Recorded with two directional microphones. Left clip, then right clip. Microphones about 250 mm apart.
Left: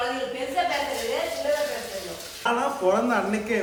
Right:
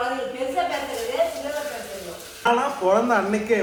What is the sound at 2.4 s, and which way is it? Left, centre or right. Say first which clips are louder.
Speech: right 3 dB; centre.